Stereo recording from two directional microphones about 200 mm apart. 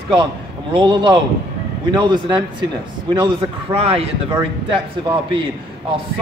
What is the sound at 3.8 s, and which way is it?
Speech, 30° right (ahead or behind).